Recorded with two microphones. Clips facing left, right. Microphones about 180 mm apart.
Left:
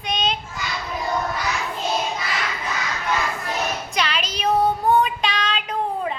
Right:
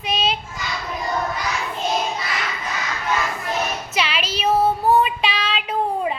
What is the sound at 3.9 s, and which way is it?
Child singing, 5° right (ahead or behind).